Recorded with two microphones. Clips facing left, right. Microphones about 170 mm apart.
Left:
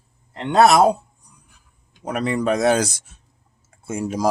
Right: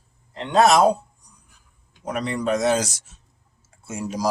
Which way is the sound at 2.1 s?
55° left (ahead or behind).